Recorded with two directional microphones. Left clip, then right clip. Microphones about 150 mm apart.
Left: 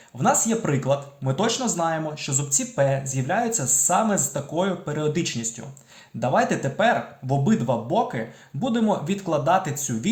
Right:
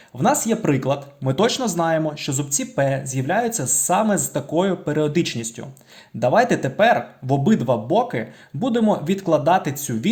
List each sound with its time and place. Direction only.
0.2 s speech: 35° right (ahead or behind)